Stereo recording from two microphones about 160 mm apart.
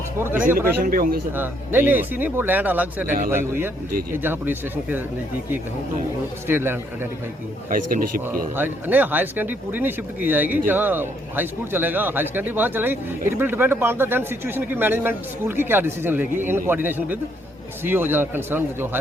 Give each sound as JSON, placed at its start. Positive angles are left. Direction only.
{"t": 0.4, "sound": "speech", "side_deg": -60}
{"t": 1.4, "sound": "a man's voice", "side_deg": -10}
{"t": 6.5, "sound": "a man's voice", "side_deg": -15}
{"t": 7.7, "sound": "speech", "side_deg": -60}
{"t": 8.5, "sound": "a man's voice", "side_deg": -10}